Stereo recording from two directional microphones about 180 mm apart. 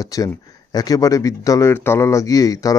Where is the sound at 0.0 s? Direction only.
20° left (ahead or behind).